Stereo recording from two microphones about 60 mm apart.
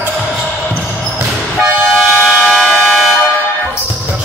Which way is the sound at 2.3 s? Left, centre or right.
Centre.